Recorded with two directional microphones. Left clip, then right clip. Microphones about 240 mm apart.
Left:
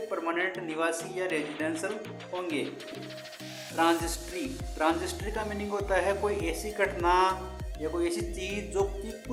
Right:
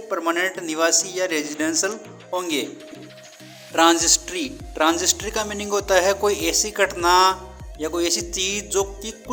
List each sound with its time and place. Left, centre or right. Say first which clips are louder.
0.1 s a man's voice: right 10 dB; right
3.8 s a man's voice: right 10 dB; right